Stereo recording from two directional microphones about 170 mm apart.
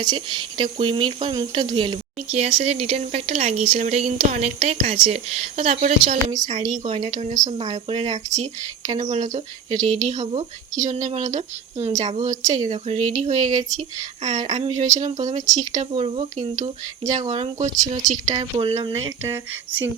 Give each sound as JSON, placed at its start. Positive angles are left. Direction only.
{"t": 0.0, "sound": "a woman's voice", "side_deg": -25}
{"t": 7.6, "sound": "a woman's voice", "side_deg": -35}
{"t": 16.0, "sound": "speech", "side_deg": -35}
{"t": 17.1, "sound": "a woman's voice", "side_deg": -45}
{"t": 18.3, "sound": "speech", "side_deg": -30}
{"t": 19.3, "sound": "speech", "side_deg": -10}